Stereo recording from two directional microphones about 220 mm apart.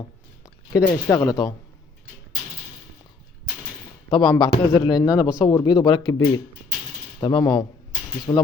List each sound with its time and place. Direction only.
0.4 s speech: 15° left (ahead or behind)
4.1 s speech: 20° left (ahead or behind)